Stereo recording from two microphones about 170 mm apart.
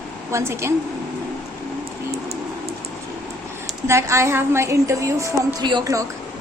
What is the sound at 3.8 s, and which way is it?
A woman's voice, 15° right (ahead or behind).